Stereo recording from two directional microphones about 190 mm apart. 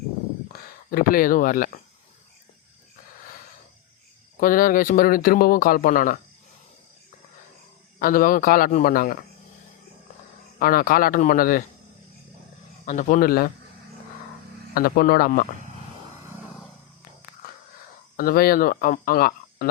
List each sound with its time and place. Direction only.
0.9 s speech: 50° left (ahead or behind)
4.4 s speech: 45° left (ahead or behind)
7.9 s speech: 45° left (ahead or behind)
10.6 s speech: 50° left (ahead or behind)
12.8 s speech: 40° left (ahead or behind)
14.8 s speech: 50° left (ahead or behind)
18.2 s speech: 50° left (ahead or behind)